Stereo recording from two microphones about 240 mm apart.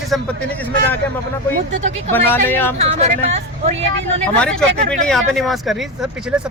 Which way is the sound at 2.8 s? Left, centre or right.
Right.